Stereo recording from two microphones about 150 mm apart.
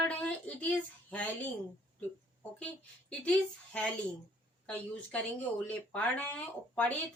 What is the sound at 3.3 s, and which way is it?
Speech, 5° left (ahead or behind).